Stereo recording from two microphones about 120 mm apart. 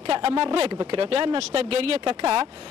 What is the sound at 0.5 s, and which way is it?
Speech, 35° right (ahead or behind).